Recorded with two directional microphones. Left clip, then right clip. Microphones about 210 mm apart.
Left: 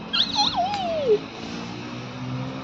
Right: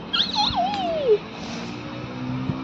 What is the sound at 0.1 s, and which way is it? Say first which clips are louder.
Cat: even; centre (ahead or behind).